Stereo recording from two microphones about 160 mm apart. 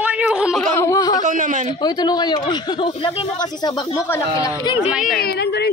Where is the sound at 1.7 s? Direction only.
25° left (ahead or behind).